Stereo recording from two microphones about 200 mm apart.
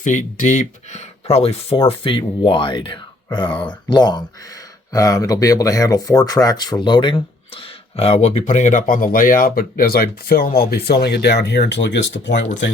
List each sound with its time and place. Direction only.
0.0 s speech: 40° left (ahead or behind); by 12.5 s 65° left (ahead or behind)